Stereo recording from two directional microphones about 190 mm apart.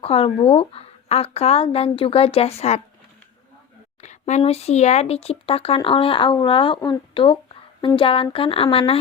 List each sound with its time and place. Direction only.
0.0 s speech: 30° left (ahead or behind)
4.0 s speech: 35° left (ahead or behind)